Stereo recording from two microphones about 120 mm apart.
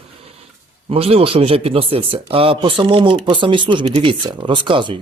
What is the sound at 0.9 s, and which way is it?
Speech, 55° right (ahead or behind).